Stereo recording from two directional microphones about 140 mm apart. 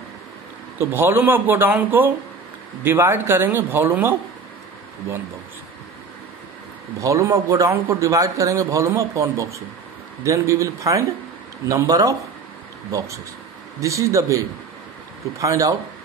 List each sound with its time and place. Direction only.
0.7 s speech: 15° right (ahead or behind)
7.0 s a man's voice: 20° right (ahead or behind)